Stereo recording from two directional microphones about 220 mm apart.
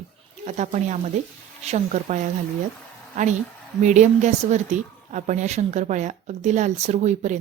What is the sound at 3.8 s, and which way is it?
A woman's voice, 35° right (ahead or behind).